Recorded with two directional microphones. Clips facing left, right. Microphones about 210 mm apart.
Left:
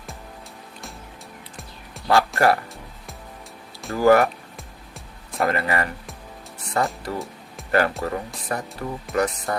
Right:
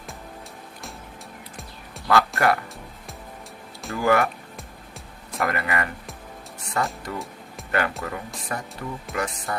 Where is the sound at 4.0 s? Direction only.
40° left (ahead or behind).